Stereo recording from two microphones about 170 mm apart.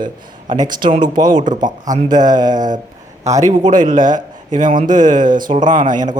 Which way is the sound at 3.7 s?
50° right (ahead or behind).